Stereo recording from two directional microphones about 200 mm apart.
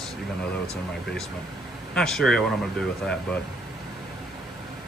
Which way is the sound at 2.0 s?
Centre (ahead or behind).